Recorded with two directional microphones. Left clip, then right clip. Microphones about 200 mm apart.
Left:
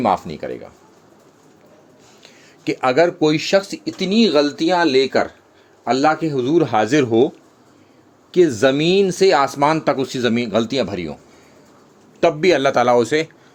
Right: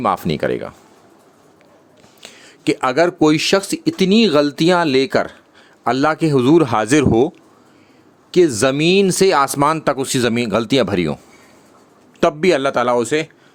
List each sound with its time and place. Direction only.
0.0 s speech: 45° right (ahead or behind)
2.2 s speech: 30° right (ahead or behind)
12.2 s speech: 30° right (ahead or behind); by 13.3 s 10° right (ahead or behind)